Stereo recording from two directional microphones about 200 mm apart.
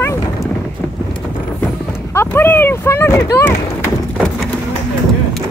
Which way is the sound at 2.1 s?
10° left (ahead or behind).